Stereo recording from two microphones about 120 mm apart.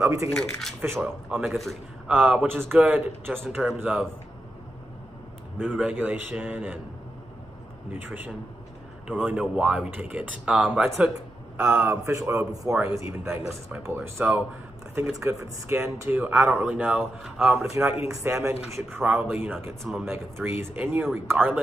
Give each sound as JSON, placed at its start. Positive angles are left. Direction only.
{"t": 0.0, "sound": "speech", "side_deg": -25}
{"t": 0.3, "sound": "speech", "side_deg": 5}
{"t": 0.7, "sound": "speech", "side_deg": -20}
{"t": 1.3, "sound": "speech", "side_deg": -5}
{"t": 5.8, "sound": "speech", "side_deg": -10}
{"t": 7.9, "sound": "speech", "side_deg": -15}
{"t": 11.1, "sound": "a sound", "side_deg": -25}
{"t": 11.8, "sound": "speech", "side_deg": -25}